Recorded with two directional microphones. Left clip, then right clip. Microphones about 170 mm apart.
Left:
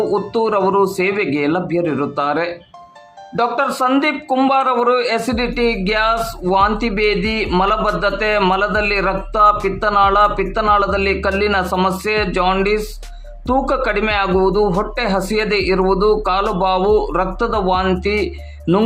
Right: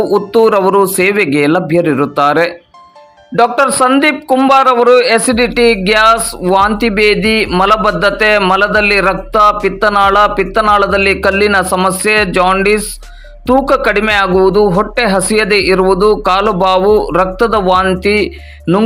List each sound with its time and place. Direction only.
0.0 s a man's voice: 25° right (ahead or behind)
18.6 s music: 10° right (ahead or behind)